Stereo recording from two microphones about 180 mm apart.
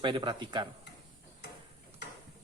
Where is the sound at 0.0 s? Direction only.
25° right (ahead or behind).